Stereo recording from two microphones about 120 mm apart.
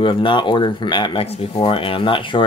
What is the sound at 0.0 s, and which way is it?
Speech, 45° left (ahead or behind).